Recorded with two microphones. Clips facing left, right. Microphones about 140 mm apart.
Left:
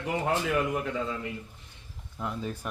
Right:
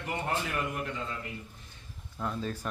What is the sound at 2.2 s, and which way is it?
Speech, 15° left (ahead or behind).